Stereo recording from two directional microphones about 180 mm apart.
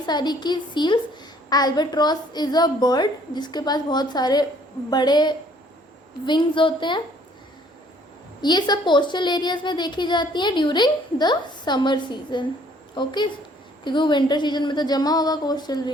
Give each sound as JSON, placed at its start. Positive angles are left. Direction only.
{"t": 0.0, "sound": "a child's voice", "side_deg": 25}
{"t": 8.4, "sound": "a child's voice", "side_deg": 25}